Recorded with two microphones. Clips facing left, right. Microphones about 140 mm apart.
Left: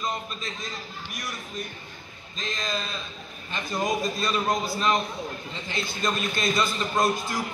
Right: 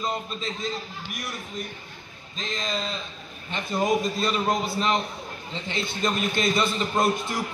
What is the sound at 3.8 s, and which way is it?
A man's voice, 25° right (ahead or behind).